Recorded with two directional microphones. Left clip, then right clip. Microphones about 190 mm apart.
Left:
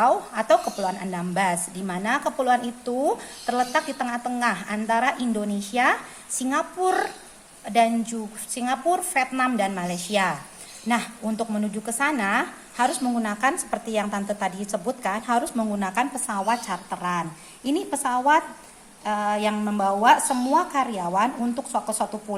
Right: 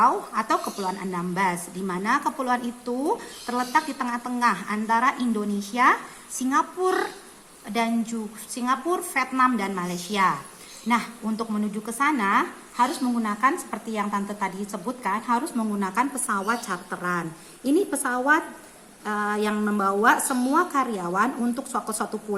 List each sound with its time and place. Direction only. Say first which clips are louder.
0.0 s a woman's voice: even; 35° left (ahead or behind); by 22.2 s 15° left (ahead or behind)